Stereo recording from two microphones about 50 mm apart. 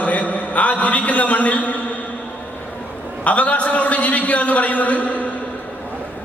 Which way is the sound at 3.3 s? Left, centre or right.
Left.